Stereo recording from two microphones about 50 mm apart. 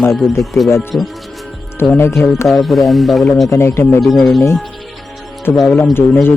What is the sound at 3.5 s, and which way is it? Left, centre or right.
Speech, left.